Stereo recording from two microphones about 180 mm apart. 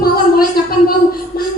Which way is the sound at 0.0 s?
55° left (ahead or behind).